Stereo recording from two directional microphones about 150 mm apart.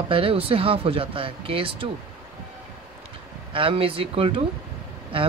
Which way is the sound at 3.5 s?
35° right (ahead or behind).